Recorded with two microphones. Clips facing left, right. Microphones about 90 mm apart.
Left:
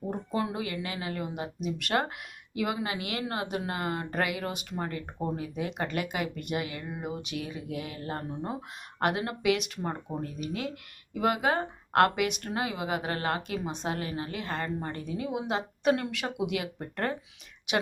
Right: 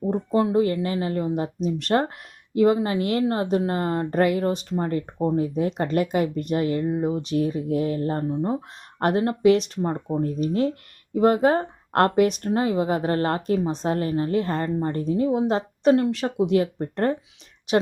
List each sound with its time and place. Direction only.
0.1 s speech: 30° right (ahead or behind)